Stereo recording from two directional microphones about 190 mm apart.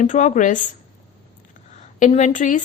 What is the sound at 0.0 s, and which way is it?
Speech, 40° left (ahead or behind).